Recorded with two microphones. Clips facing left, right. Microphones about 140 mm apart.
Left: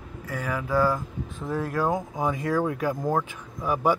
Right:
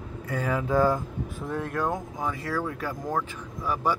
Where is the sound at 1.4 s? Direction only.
Centre (ahead or behind).